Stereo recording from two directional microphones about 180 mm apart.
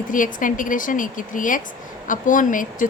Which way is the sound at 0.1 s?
45° left (ahead or behind).